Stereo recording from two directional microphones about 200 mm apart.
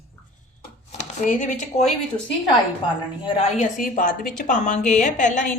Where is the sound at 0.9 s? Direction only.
40° left (ahead or behind).